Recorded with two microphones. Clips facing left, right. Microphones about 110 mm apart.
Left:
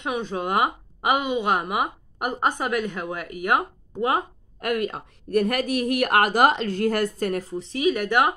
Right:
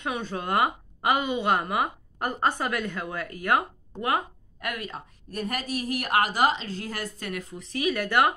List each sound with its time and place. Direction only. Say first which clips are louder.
0.0 s a woman's voice: left 4 dB; 15° left (ahead or behind)
4.6 s speech: left 9 dB; 50° left (ahead or behind); by 8.4 s 15° left (ahead or behind)